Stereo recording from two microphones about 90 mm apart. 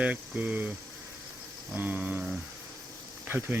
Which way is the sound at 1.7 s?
20° right (ahead or behind).